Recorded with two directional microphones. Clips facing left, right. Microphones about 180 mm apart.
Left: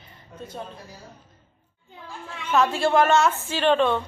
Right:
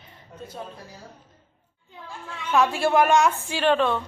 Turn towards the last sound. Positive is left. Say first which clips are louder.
# left 1 dB
turn(degrees=-5)  # may be behind; listen again after turning